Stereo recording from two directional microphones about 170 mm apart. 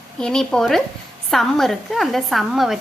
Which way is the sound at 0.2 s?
5° left (ahead or behind).